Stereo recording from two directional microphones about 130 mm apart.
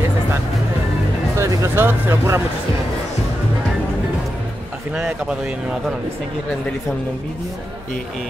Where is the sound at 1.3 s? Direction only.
25° right (ahead or behind).